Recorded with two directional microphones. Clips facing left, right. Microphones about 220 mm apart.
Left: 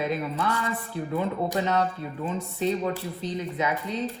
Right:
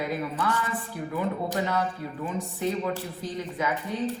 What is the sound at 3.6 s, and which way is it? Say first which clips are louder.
Speech: left 1 dB; 20° left (ahead or behind).